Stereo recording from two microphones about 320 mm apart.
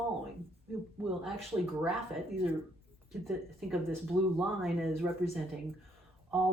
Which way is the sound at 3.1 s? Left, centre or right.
Centre.